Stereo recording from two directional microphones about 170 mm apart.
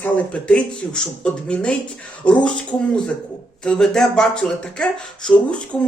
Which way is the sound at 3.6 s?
5° left (ahead or behind).